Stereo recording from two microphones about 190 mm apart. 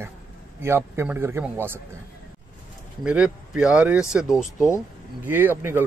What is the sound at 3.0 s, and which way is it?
Speech, 5° right (ahead or behind).